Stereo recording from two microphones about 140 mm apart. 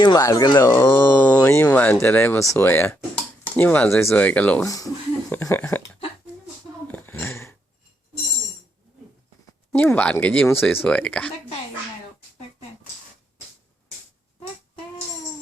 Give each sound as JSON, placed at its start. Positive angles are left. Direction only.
{"t": 0.0, "sound": "speech", "side_deg": 25}
{"t": 4.6, "sound": "speech", "side_deg": 25}
{"t": 6.8, "sound": "a sound", "side_deg": 15}
{"t": 9.7, "sound": "speech", "side_deg": 10}